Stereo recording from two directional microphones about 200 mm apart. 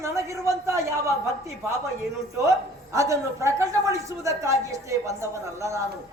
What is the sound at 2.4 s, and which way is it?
A woman's voice, 15° right (ahead or behind).